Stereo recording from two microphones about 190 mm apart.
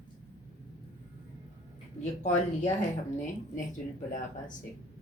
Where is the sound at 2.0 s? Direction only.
40° left (ahead or behind).